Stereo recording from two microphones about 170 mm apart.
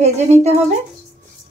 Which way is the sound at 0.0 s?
40° right (ahead or behind).